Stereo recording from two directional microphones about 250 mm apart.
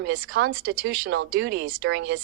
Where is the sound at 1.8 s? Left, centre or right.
Right.